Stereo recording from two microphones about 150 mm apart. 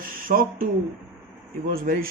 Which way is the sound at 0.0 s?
65° right (ahead or behind).